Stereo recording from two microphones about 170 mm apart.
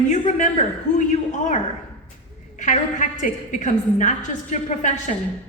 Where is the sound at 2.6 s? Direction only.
45° left (ahead or behind).